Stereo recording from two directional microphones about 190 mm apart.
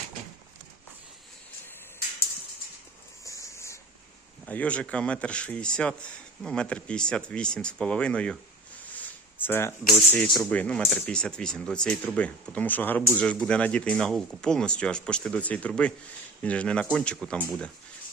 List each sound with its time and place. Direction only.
3.2 s a sound: 15° left (ahead or behind)
4.4 s speech: 5° left (ahead or behind)
9.4 s speech: 10° left (ahead or behind)